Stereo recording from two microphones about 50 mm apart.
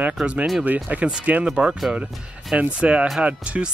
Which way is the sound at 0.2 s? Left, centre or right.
Right.